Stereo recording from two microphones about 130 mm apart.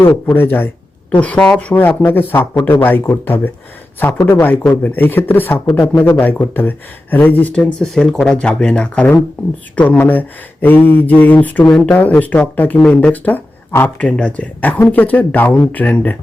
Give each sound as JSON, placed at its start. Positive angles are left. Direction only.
{"t": 0.3, "sound": "speech", "side_deg": 15}
{"t": 5.6, "sound": "a man's voice", "side_deg": 0}
{"t": 6.1, "sound": "speech", "side_deg": 15}